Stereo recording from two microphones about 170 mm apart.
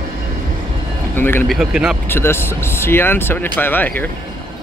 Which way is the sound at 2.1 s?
15° left (ahead or behind).